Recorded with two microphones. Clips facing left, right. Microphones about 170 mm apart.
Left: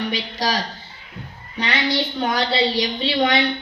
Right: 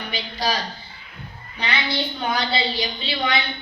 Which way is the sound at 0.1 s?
90° left.